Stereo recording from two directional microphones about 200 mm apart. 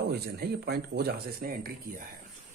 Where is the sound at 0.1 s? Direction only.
55° right (ahead or behind).